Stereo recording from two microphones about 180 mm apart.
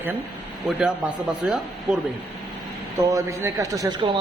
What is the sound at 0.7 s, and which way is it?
Speech, 5° right (ahead or behind).